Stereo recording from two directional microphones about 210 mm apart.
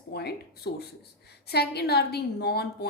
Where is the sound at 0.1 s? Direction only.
50° left (ahead or behind).